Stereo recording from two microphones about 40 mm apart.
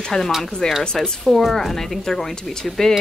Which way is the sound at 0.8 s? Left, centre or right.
Centre.